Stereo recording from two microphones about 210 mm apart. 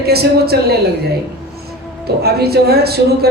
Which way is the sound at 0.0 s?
50° right (ahead or behind).